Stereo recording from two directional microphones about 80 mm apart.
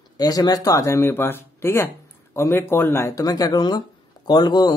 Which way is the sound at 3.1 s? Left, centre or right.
Left.